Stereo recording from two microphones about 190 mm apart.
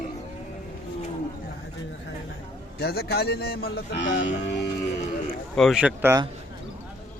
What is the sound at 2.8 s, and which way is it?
Speech, 55° left (ahead or behind).